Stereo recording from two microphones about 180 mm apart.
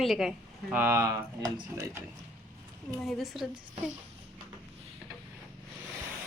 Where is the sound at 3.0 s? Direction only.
Centre (ahead or behind).